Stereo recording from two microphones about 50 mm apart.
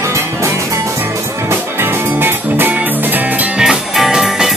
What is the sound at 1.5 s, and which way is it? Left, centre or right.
Music, right.